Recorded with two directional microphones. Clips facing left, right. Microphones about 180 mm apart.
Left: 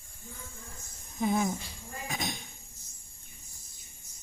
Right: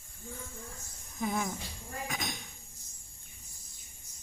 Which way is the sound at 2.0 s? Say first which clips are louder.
Left 3 dB; 30° left (ahead or behind).